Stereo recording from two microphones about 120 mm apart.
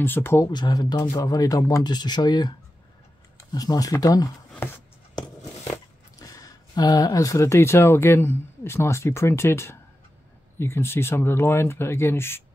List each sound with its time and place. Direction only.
0.0 s speech: 20° left (ahead or behind)
0.5 s speech: 35° left (ahead or behind)
3.5 s speech: 30° left (ahead or behind)
6.1 s speech: 30° left (ahead or behind)